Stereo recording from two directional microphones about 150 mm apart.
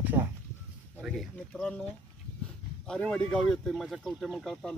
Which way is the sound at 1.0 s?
Centre (ahead or behind).